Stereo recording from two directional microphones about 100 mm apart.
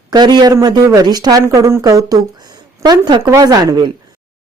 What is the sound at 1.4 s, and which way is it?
A woman's voice, 30° right (ahead or behind).